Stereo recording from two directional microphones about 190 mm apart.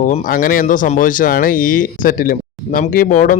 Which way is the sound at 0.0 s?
45° left (ahead or behind).